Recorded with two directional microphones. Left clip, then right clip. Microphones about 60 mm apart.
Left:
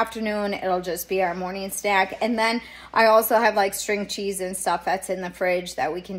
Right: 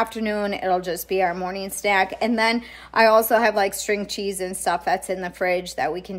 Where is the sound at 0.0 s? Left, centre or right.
Centre.